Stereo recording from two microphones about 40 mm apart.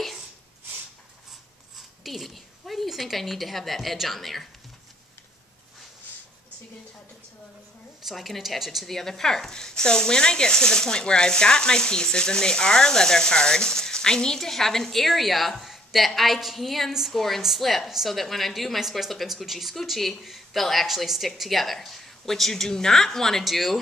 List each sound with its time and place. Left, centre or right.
1.8 s a woman's voice: centre
8.0 s a woman's voice: centre
8.8 s a woman's voice: centre
17.8 s speech: centre
18.1 s a woman's voice: centre
23.4 s a woman's voice: centre